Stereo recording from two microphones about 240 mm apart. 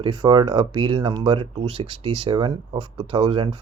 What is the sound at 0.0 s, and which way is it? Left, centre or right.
Speech, centre.